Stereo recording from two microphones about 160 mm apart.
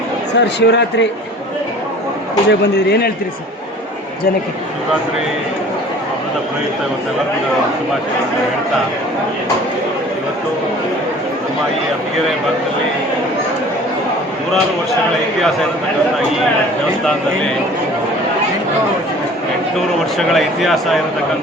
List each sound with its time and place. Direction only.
0.3 s speech: 90° left
2.5 s speech: 90° left
20.1 s speech: centre (ahead or behind)